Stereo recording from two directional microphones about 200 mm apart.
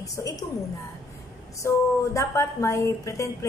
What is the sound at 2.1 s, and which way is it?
A woman's voice, 15° left (ahead or behind).